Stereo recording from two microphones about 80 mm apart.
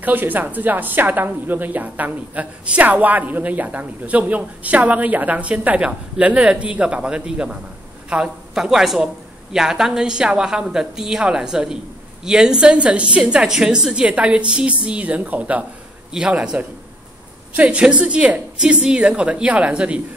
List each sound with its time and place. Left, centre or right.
0.0 s a woman's voice: right